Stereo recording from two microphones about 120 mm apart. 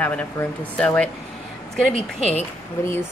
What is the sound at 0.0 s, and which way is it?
Speech, 10° left (ahead or behind).